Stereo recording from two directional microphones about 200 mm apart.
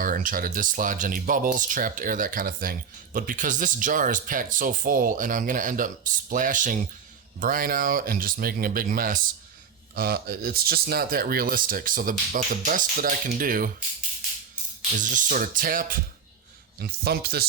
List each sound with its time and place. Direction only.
0.0 s speech: 45° right (ahead or behind)
14.9 s speech: 40° right (ahead or behind)